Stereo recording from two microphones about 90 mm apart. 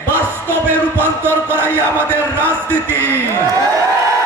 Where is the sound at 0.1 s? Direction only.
25° right (ahead or behind).